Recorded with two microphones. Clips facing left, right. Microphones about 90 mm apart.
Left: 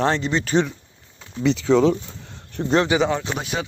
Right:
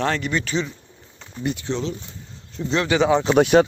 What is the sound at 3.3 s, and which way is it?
Speech, 65° right (ahead or behind).